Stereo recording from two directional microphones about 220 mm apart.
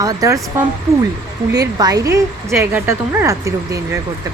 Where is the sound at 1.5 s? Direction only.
15° right (ahead or behind).